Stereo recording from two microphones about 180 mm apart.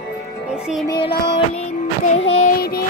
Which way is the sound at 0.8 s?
25° left (ahead or behind).